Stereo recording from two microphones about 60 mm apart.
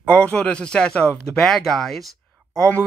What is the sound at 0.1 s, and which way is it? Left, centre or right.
Speech, left.